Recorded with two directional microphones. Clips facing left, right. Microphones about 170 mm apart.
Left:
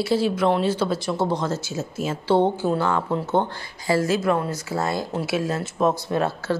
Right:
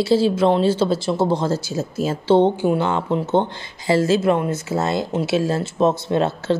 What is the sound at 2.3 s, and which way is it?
A woman's voice, 20° right (ahead or behind).